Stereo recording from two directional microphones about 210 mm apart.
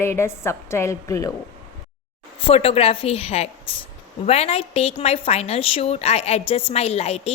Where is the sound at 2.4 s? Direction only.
30° left (ahead or behind).